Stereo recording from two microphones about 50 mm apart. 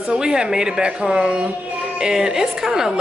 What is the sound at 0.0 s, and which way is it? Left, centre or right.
A woman's voice, centre.